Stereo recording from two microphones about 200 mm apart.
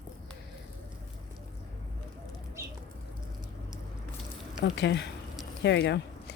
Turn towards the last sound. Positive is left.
turn(degrees=60)  # may be behind; listen again after turning